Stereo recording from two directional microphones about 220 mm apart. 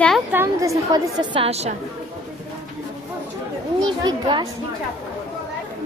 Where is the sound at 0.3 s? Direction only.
10° right (ahead or behind); by 1.7 s 30° right (ahead or behind).